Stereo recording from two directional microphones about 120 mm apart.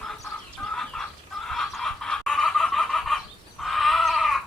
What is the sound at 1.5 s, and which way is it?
Snicker, 5° left (ahead or behind).